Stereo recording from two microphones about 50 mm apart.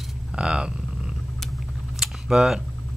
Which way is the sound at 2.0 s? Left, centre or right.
Centre.